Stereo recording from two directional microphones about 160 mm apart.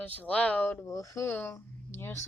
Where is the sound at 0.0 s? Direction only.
10° left (ahead or behind).